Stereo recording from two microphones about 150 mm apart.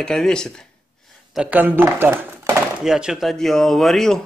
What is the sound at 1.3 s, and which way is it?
Speech, 10° right (ahead or behind).